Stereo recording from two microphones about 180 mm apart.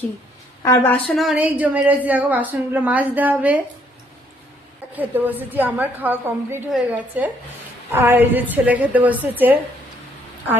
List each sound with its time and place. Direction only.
0.6 s a woman's voice: 15° left (ahead or behind)
1.0 s a woman's voice: centre (ahead or behind)
4.9 s a woman's voice: 10° right (ahead or behind)